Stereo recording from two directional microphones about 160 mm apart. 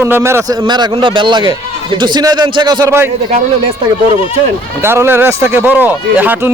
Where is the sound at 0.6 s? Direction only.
30° right (ahead or behind).